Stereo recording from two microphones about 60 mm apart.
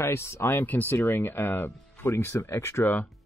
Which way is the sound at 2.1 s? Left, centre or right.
Left.